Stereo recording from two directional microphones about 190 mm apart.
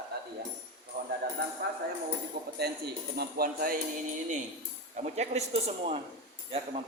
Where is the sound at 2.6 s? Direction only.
55° right (ahead or behind).